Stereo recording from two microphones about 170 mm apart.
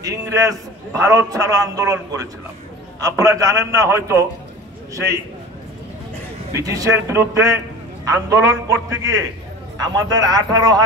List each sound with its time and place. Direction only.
0.0 s a man's voice: 20° right (ahead or behind)
6.5 s a man's voice: 20° right (ahead or behind)